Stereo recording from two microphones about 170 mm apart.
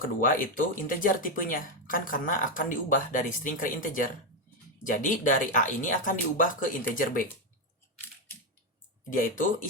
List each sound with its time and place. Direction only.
0.2 s speech: 55° left (ahead or behind)
9.1 s speech: 55° left (ahead or behind)